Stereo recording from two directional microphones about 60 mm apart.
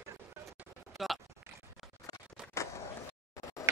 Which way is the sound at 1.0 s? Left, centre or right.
Centre.